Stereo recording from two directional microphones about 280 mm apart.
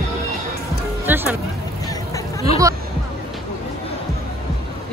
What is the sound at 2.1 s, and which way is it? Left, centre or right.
Hubbub, left.